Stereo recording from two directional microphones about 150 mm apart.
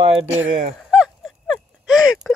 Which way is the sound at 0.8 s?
5° right (ahead or behind).